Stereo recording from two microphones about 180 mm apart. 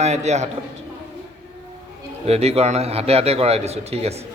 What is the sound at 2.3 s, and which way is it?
A man's voice, 35° right (ahead or behind).